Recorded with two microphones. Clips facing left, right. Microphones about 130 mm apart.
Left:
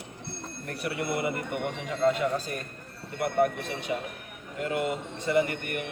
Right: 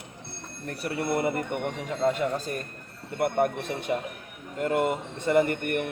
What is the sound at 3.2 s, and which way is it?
A man's voice, 45° right (ahead or behind).